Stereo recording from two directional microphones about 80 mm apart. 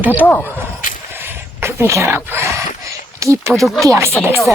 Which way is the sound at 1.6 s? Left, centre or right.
Right.